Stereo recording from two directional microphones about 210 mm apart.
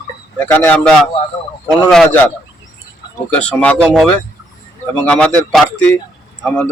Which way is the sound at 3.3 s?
5° left (ahead or behind).